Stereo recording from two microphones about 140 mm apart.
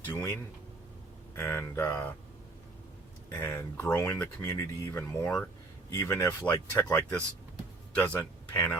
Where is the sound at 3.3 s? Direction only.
15° left (ahead or behind).